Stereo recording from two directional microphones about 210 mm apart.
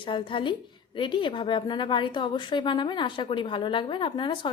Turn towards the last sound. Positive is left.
turn(degrees=20)  # may be behind; listen again after turning